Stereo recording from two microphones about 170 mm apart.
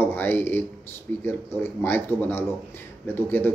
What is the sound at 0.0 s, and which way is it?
A man's voice, 10° left (ahead or behind).